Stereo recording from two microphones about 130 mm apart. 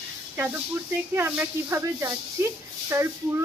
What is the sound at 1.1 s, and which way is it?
A woman's voice, 20° right (ahead or behind).